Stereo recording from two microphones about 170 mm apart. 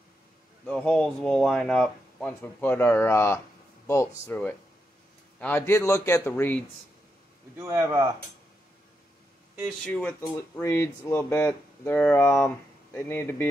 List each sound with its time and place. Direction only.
0.7 s speech: 5° left (ahead or behind)
5.4 s speech: 15° left (ahead or behind)
7.6 s speech: 20° right (ahead or behind)
9.8 s speech: 5° left (ahead or behind)
10.6 s speech: 15° left (ahead or behind)